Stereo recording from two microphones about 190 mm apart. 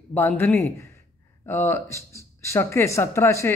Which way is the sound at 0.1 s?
10° left (ahead or behind).